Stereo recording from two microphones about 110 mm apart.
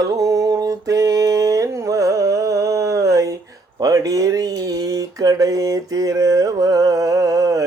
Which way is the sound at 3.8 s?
30° right (ahead or behind).